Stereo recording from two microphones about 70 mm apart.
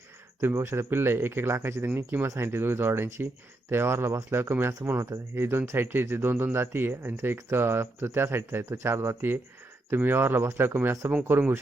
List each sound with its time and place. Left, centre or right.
0.4 s speech: right
2.2 s speech: right